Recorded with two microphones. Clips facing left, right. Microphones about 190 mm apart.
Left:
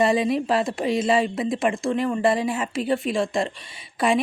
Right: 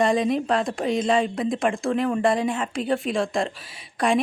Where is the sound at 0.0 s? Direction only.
5° left (ahead or behind).